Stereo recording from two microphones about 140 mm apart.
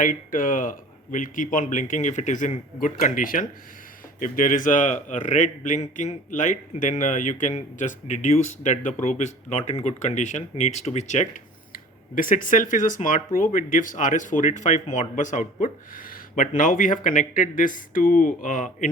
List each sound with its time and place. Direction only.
0.0 s a man's voice: 75° left (ahead or behind); by 11.3 s 55° left (ahead or behind)
11.7 s speech: 75° left (ahead or behind)